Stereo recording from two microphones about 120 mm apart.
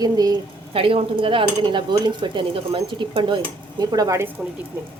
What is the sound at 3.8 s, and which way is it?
Speech, 30° right (ahead or behind).